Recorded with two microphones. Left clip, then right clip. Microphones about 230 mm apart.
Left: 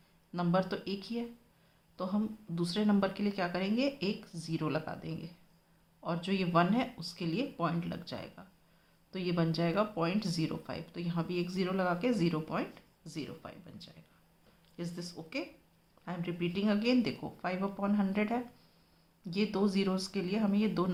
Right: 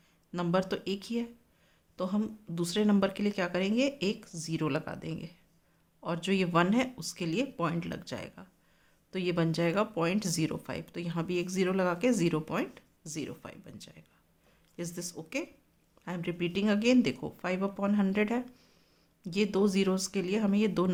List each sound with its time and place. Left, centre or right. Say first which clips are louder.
0.3 s speech: right 2 dB; right